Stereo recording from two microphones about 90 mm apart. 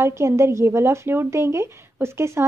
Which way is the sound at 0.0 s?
30° right (ahead or behind).